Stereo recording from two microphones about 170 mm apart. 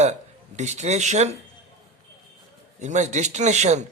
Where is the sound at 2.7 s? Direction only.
45° right (ahead or behind).